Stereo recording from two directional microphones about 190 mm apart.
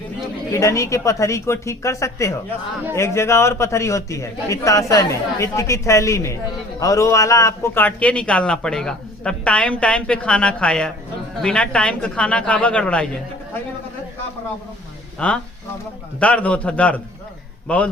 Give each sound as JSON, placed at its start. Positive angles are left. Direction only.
{"t": 0.5, "sound": "a man's voice", "side_deg": 15}
{"t": 15.2, "sound": "a man's voice", "side_deg": 5}